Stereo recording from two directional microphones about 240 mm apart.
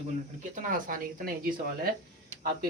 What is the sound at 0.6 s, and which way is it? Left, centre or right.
Speech, right.